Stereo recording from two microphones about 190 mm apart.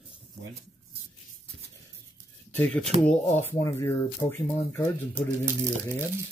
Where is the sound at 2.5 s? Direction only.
10° left (ahead or behind).